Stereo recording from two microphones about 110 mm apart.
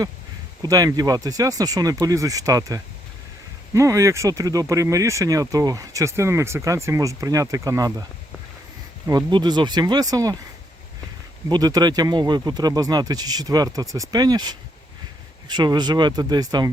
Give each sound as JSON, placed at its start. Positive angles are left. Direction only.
{"t": 0.6, "sound": "speech", "side_deg": -35}
{"t": 9.0, "sound": "speech", "side_deg": -40}
{"t": 11.4, "sound": "speech", "side_deg": -40}